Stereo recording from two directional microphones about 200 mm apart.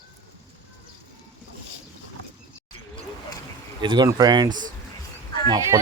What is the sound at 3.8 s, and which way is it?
Speech, 20° right (ahead or behind).